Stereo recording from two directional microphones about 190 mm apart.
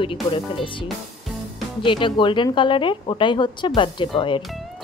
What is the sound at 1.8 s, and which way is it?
Speech, 25° left (ahead or behind).